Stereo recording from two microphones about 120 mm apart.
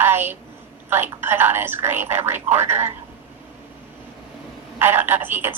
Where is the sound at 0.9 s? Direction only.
20° right (ahead or behind).